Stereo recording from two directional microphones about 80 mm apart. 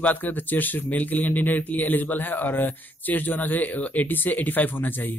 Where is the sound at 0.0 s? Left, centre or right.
Left.